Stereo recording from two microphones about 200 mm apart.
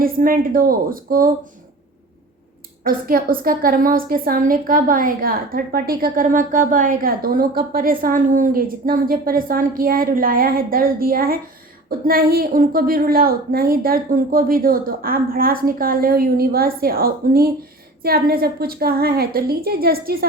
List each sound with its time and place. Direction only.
0.0 s a woman's voice: 45° right (ahead or behind)
2.8 s a woman's voice: 45° right (ahead or behind)